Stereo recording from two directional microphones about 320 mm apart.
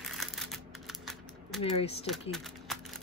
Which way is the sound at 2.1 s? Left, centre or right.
Centre.